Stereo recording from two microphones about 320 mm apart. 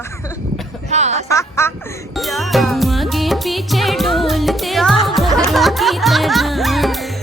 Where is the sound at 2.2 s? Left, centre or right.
Centre.